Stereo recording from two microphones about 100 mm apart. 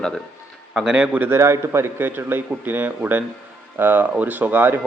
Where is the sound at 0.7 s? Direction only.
5° right (ahead or behind).